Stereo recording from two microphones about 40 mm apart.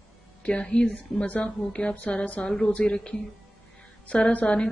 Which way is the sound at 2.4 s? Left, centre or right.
Centre.